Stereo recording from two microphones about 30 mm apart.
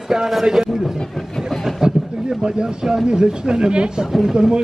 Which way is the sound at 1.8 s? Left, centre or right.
Right.